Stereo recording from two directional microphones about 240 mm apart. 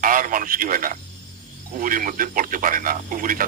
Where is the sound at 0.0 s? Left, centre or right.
Right.